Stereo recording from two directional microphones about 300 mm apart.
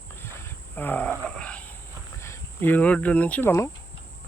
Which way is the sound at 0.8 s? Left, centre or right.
Centre.